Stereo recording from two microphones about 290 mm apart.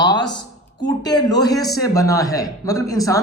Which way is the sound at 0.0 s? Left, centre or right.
Centre.